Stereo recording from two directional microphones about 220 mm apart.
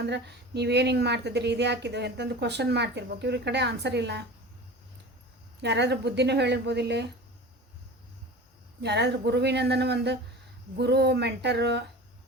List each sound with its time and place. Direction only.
0.0 s a woman's voice: 50° right (ahead or behind)
5.6 s a woman's voice: 50° right (ahead or behind)
8.8 s a woman's voice: 50° right (ahead or behind)